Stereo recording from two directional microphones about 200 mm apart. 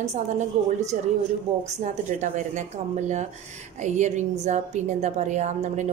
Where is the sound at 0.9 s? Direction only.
40° right (ahead or behind).